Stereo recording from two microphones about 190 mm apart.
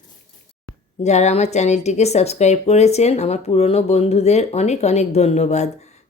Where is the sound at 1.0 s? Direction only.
35° left (ahead or behind).